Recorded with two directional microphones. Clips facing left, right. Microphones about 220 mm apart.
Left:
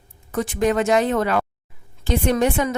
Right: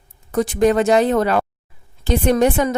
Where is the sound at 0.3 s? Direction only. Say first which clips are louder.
Right 5 dB; 35° right (ahead or behind).